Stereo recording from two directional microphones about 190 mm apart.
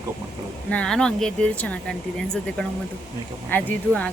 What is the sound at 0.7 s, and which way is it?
Speech, 5° left (ahead or behind).